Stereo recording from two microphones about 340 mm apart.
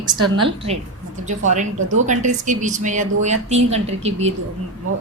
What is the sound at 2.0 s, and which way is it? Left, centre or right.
A woman's voice, right.